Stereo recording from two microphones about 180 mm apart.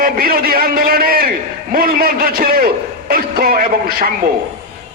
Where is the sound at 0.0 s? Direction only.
55° right (ahead or behind).